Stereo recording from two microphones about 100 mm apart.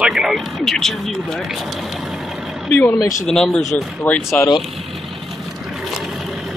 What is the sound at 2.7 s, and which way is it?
Speech, 15° left (ahead or behind).